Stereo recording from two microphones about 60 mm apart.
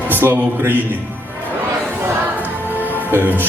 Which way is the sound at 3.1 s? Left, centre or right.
Right.